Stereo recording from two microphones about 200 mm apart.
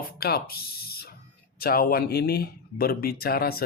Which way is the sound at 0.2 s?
50° left (ahead or behind).